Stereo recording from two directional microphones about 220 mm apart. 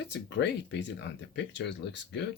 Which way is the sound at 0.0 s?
55° left (ahead or behind).